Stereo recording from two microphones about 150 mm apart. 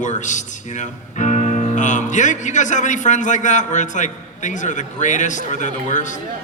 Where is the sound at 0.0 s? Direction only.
55° left (ahead or behind).